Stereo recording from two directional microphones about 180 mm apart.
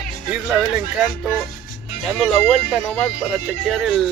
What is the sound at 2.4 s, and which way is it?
Speech, 5° left (ahead or behind).